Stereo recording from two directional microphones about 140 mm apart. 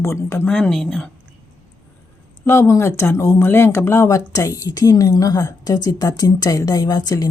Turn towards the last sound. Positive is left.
turn(degrees=25)  # may be behind; listen again after turning